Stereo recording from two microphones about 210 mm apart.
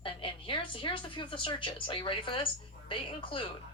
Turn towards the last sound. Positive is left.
turn(degrees=25)  # may be behind; listen again after turning